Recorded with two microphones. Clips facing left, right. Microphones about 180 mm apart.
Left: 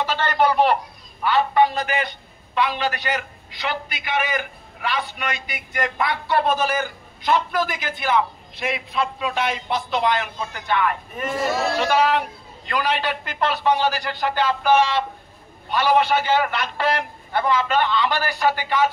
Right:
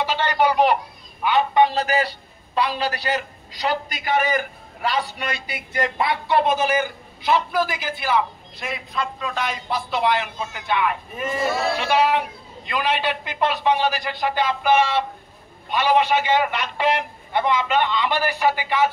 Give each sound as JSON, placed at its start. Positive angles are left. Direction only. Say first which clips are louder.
{"t": 0.0, "sound": "a man's voice", "louder": "even", "side_deg": -10}
{"t": 6.5, "sound": "a man's voice", "louder": "right 2 dB", "side_deg": -10}
{"t": 8.5, "sound": "a man's voice", "louder": "left 4 dB", "side_deg": 5}